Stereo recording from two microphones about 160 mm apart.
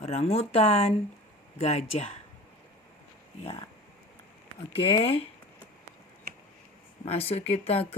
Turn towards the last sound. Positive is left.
turn(degrees=40)  # may be behind; listen again after turning